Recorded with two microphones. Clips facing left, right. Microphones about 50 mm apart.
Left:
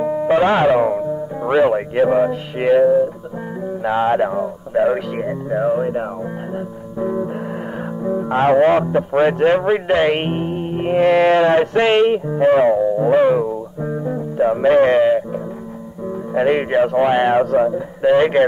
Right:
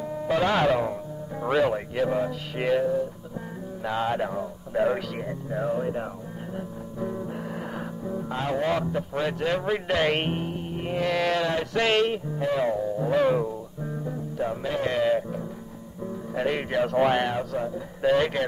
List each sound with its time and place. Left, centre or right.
0.0 s music: left
1.4 s speech: left
7.0 s music: left
8.0 s speech: left
10.5 s music: left
12.3 s speech: left
13.8 s music: left
14.7 s speech: left
16.3 s speech: left
16.9 s speech: centre
17.3 s speech: left
17.7 s speech: left